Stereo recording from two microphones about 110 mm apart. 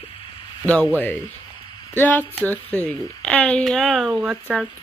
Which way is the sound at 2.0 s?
15° left (ahead or behind).